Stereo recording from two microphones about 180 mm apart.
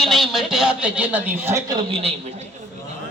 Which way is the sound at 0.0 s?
Centre (ahead or behind).